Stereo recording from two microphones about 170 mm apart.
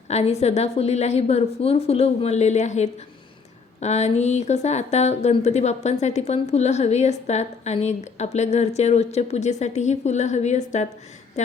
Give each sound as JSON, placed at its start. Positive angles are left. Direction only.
{"t": 0.1, "sound": "a woman's voice", "side_deg": 40}